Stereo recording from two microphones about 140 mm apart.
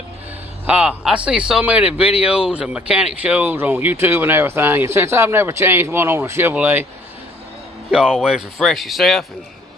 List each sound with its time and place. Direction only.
0.7 s speech: 10° right (ahead or behind)
7.9 s speech: 5° right (ahead or behind)